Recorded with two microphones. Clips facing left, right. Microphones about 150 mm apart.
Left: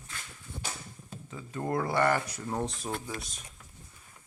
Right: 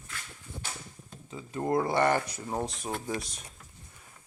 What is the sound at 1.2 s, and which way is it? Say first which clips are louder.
Speech: right 3 dB; 20° right (ahead or behind).